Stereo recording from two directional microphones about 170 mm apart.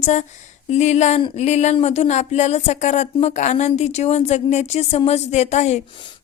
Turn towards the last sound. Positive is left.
turn(degrees=40)  # may be behind; listen again after turning